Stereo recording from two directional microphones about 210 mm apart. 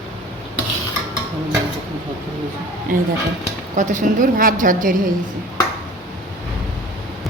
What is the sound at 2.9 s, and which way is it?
A woman's voice, 40° right (ahead or behind).